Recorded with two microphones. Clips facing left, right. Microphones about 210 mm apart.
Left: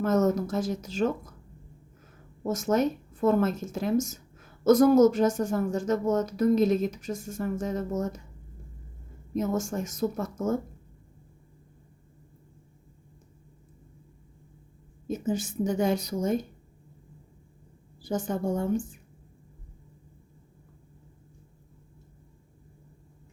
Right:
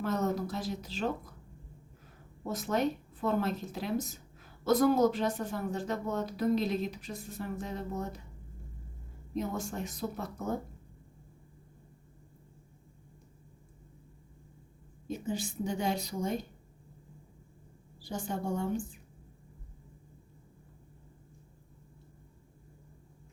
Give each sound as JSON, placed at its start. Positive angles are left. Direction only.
{"t": 0.0, "sound": "a woman's voice", "side_deg": 45}
{"t": 2.5, "sound": "a woman's voice", "side_deg": 45}
{"t": 7.9, "sound": "speech", "side_deg": 90}
{"t": 9.3, "sound": "a woman's voice", "side_deg": 45}
{"t": 15.3, "sound": "a woman's voice", "side_deg": 50}
{"t": 18.1, "sound": "a woman's voice", "side_deg": 45}